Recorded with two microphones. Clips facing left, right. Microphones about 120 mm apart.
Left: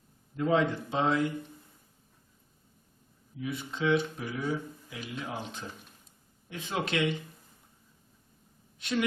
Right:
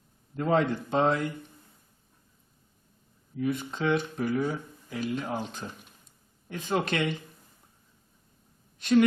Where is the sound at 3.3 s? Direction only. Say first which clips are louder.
Right 6 dB; 50° right (ahead or behind).